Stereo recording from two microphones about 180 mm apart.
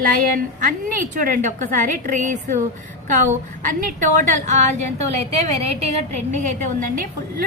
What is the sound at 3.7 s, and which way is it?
A woman's voice, 45° right (ahead or behind).